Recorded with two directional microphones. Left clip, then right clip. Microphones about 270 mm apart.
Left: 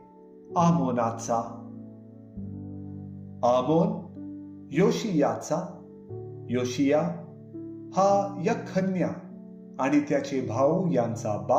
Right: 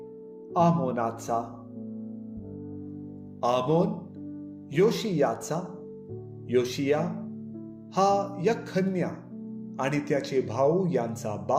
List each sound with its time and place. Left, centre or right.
0.5 s speech: right
3.4 s speech: right